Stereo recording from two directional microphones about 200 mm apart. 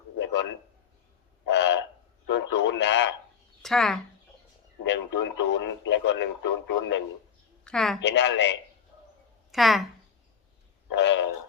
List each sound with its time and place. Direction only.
0.2 s a sound: 65° left (ahead or behind)
2.3 s radio: 60° left (ahead or behind)
3.6 s speech: centre (ahead or behind)
4.9 s speech: 65° left (ahead or behind)
7.6 s a woman's voice: 5° left (ahead or behind)
8.0 s speech: 60° left (ahead or behind)
9.5 s speech: centre (ahead or behind)
10.9 s speech: 60° left (ahead or behind)